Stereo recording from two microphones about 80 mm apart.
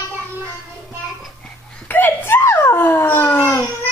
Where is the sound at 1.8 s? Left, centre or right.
Left.